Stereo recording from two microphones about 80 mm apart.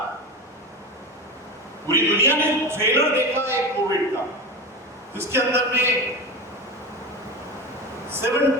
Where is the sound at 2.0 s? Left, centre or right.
Right.